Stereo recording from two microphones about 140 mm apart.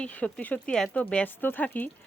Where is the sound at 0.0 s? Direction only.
10° left (ahead or behind).